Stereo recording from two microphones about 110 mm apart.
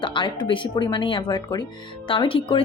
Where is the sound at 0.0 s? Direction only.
50° left (ahead or behind).